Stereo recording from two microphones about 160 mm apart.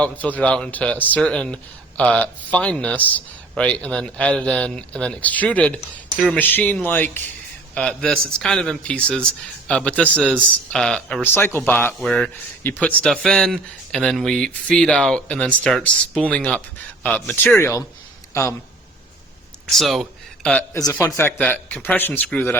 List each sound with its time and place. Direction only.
0.0 s a man's voice: 10° left (ahead or behind)
19.7 s a man's voice: centre (ahead or behind)
20.7 s speech: 20° left (ahead or behind)